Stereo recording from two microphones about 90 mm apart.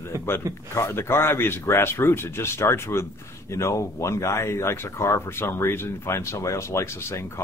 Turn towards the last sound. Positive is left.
turn(degrees=30)  # may be behind; listen again after turning